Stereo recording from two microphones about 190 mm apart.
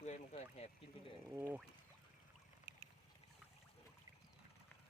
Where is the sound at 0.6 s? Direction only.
35° left (ahead or behind).